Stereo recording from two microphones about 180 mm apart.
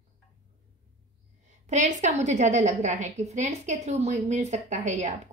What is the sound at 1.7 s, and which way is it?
A woman's voice, 40° right (ahead or behind).